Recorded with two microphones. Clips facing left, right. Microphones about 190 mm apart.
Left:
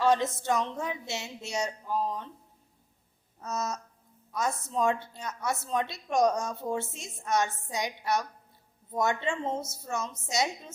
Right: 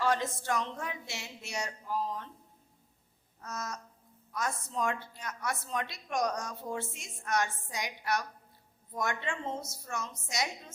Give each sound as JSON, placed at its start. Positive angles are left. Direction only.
{"t": 0.0, "sound": "a woman's voice", "side_deg": 20}
{"t": 3.4, "sound": "a woman's voice", "side_deg": 20}